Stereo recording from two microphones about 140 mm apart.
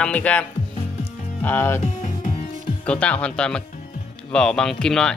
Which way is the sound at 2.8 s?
10° left (ahead or behind).